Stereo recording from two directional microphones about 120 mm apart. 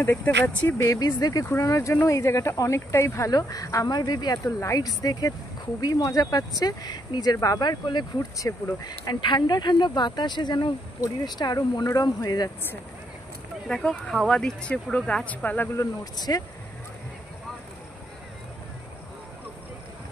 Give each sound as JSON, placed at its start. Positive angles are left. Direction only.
{"t": 0.0, "sound": "speech", "side_deg": 15}
{"t": 0.8, "sound": "speech", "side_deg": 30}
{"t": 13.7, "sound": "speech", "side_deg": 5}
{"t": 15.8, "sound": "speech", "side_deg": 35}